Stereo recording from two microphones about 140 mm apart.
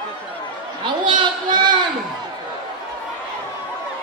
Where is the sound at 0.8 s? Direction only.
35° right (ahead or behind).